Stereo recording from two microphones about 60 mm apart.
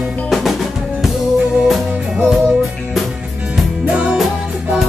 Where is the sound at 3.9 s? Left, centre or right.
Right.